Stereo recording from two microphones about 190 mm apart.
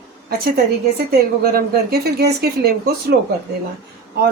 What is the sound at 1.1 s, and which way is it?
Speech, 55° right (ahead or behind).